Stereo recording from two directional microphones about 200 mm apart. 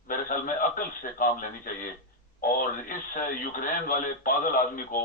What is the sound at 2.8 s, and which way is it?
Speech, 45° left (ahead or behind).